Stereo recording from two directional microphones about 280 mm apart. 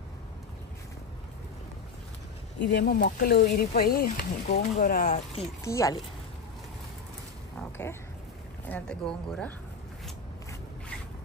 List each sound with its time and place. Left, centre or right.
2.7 s speech: left
5.6 s speech: centre
8.6 s speech: centre